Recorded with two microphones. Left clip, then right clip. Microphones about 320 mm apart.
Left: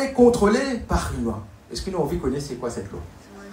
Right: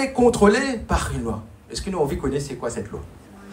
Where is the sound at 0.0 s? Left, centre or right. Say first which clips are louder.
Even; right.